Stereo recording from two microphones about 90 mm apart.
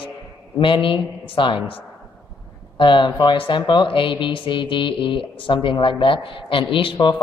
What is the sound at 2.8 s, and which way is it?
Speech, 65° left (ahead or behind).